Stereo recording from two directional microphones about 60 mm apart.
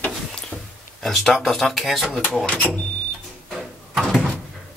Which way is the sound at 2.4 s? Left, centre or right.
Left.